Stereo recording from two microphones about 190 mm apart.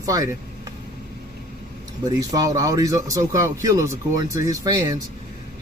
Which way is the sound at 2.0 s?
20° right (ahead or behind).